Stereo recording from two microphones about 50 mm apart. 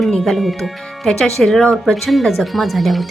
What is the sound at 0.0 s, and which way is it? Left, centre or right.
Speech, centre.